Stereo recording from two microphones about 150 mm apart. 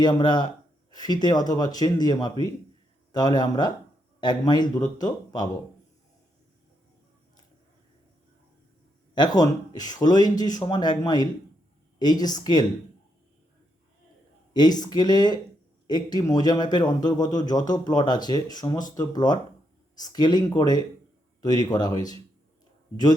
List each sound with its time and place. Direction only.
0.0 s speech: 30° left (ahead or behind)
9.1 s speech: 25° left (ahead or behind)
14.5 s speech: 25° left (ahead or behind)